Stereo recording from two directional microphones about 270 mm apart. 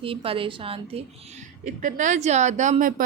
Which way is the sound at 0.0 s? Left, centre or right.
Centre.